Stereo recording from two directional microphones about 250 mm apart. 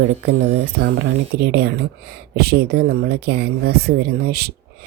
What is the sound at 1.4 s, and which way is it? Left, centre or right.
Speech, right.